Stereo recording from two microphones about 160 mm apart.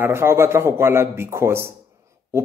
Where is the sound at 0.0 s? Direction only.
15° right (ahead or behind).